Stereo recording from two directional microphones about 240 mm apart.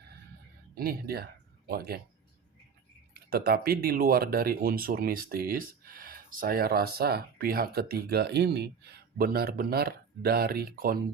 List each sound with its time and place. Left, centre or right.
0.8 s speech: right
3.2 s speech: right